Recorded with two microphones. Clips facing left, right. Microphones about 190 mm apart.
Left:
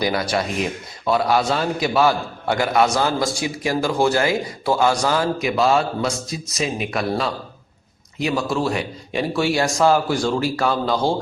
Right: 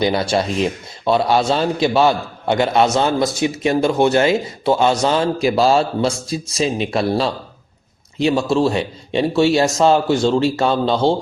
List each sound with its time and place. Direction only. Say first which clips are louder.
0.0 s a man's voice: right 4 dB; 25° right (ahead or behind)